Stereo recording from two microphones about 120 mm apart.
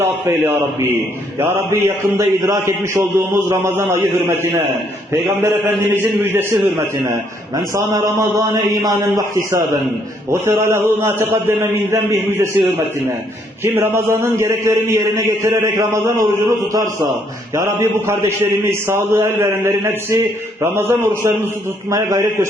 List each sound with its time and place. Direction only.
0.0 s a man's voice: 20° right (ahead or behind)
7.1 s a man's voice: 30° right (ahead or behind)
13.7 s a man's voice: 20° right (ahead or behind)
18.9 s a man's voice: 20° right (ahead or behind)